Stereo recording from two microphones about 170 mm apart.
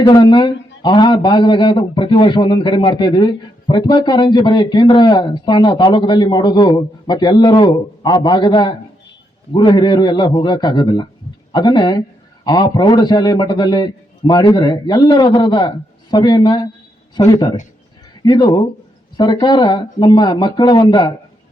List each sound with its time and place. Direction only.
0.0 s a man's voice: 25° left (ahead or behind)